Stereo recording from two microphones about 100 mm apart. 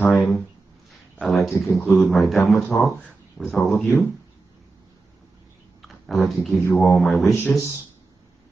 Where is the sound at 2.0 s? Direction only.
Centre (ahead or behind).